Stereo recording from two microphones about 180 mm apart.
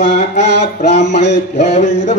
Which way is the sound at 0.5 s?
70° left (ahead or behind).